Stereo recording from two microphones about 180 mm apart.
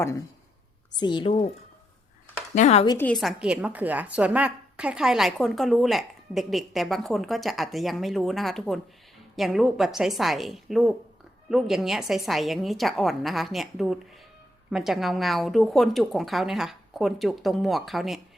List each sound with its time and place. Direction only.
0.9 s a woman's voice: 25° left (ahead or behind)
2.6 s speech: 35° left (ahead or behind)
3.0 s a woman's voice: centre (ahead or behind)